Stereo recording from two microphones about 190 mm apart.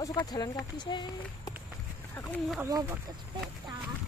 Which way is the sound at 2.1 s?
10° left (ahead or behind).